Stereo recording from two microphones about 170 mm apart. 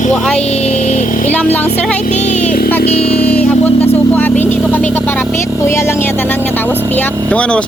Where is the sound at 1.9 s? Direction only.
45° left (ahead or behind).